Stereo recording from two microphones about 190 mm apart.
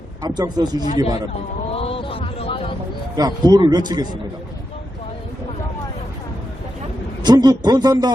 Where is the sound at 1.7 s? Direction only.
30° left (ahead or behind).